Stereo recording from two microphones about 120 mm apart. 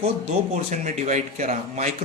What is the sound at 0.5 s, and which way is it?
Speech, 90° right.